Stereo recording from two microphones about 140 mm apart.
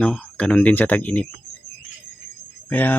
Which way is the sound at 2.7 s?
10° left (ahead or behind).